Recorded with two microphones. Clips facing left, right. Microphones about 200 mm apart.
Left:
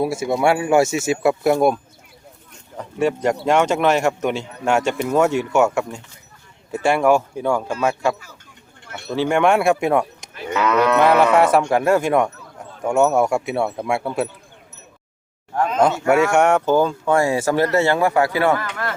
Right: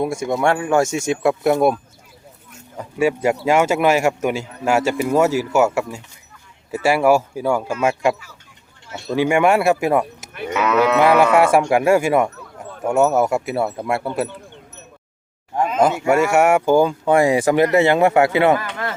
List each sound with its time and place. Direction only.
0.0 s speech: 5° left (ahead or behind)
2.5 s a sound: 5° right (ahead or behind)
3.4 s speech: 5° right (ahead or behind)
15.5 s speech: 5° right (ahead or behind)